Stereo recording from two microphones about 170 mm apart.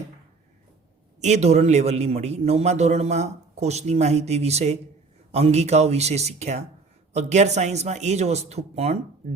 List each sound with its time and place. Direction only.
1.2 s a man's voice: 40° right (ahead or behind)